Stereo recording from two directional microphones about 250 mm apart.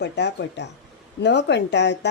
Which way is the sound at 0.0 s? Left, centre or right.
Left.